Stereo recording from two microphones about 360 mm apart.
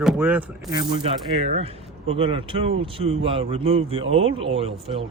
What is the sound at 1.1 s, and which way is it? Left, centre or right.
Speech, centre.